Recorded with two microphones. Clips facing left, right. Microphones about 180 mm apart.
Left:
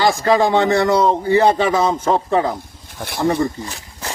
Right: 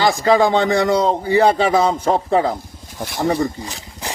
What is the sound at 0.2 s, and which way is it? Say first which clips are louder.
Speech: right 1 dB; 15° right (ahead or behind).